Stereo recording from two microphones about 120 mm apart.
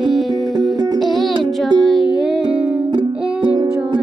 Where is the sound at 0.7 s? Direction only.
30° right (ahead or behind).